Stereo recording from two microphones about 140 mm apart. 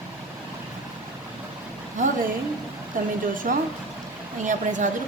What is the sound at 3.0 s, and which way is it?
A woman's voice, 75° right (ahead or behind).